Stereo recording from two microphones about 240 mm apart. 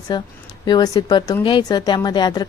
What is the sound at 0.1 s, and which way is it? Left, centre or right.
Speech, centre.